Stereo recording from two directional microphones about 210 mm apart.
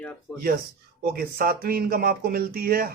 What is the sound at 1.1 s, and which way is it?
Speech, 45° right (ahead or behind).